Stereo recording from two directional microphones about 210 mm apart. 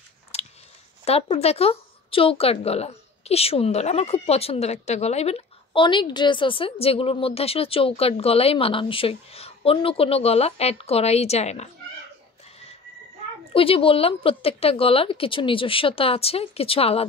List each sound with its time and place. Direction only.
0.3 s biting: 30° left (ahead or behind)
1.0 s speech: 30° left (ahead or behind)
13.5 s speech: 25° left (ahead or behind)